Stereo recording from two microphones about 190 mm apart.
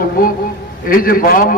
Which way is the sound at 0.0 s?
50° left (ahead or behind).